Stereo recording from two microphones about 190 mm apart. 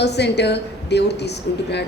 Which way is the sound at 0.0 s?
60° left (ahead or behind).